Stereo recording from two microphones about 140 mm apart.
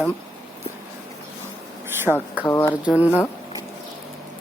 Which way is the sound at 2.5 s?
20° left (ahead or behind).